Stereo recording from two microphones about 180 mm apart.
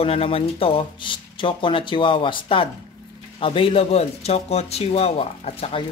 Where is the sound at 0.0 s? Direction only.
30° left (ahead or behind).